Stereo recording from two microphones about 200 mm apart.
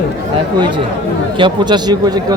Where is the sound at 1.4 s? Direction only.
20° right (ahead or behind).